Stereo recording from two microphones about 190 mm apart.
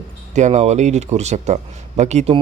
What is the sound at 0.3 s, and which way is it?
A man's voice, 35° right (ahead or behind).